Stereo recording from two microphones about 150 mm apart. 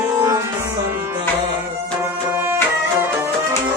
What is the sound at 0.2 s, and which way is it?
Music, 20° right (ahead or behind).